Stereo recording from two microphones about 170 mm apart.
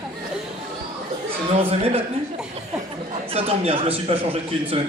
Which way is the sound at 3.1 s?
35° right (ahead or behind).